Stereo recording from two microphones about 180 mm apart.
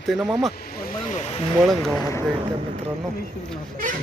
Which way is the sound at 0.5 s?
55° left (ahead or behind).